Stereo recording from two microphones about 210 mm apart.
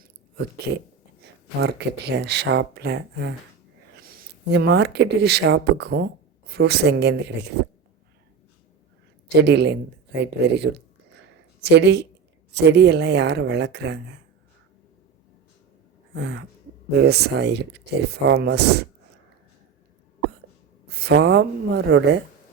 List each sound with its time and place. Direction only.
0.7 s speech: 50° right (ahead or behind)
9.3 s speech: 55° right (ahead or behind)
11.7 s speech: 55° right (ahead or behind)
16.1 s speech: 55° right (ahead or behind)
20.8 s speech: 50° right (ahead or behind)